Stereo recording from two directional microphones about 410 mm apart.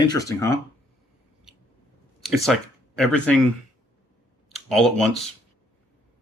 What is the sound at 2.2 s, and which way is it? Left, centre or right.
Speech, centre.